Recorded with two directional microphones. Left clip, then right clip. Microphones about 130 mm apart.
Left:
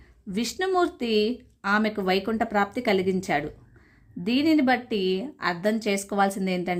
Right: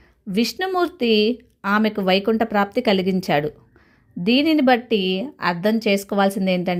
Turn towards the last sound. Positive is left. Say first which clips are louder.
# right 6 dB
turn(degrees=-40)  # may be behind; listen again after turning